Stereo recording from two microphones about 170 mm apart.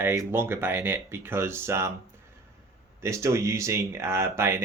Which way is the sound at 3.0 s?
15° right (ahead or behind).